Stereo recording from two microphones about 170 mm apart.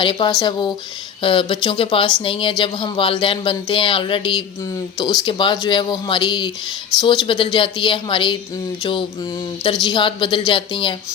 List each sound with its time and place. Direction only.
0.0 s speech: 30° left (ahead or behind)